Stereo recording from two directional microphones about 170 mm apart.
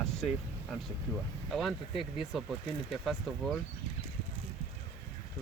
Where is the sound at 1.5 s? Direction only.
Centre (ahead or behind).